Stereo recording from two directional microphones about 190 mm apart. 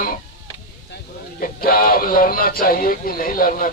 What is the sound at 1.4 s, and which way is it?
Speech, 50° left (ahead or behind).